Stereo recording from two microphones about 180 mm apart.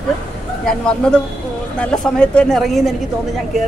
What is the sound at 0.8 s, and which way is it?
Speech, 5° left (ahead or behind).